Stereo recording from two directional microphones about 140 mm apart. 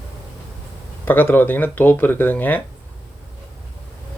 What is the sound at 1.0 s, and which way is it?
Speech, 15° left (ahead or behind).